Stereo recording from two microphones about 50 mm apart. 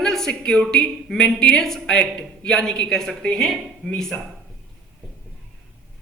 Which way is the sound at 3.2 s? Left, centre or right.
Centre.